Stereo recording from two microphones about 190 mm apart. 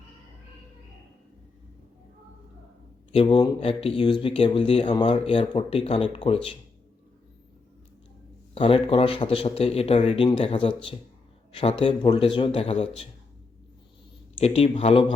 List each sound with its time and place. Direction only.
3.1 s speech: 25° left (ahead or behind)
8.5 s speech: 30° left (ahead or behind)
14.3 s speech: 35° left (ahead or behind)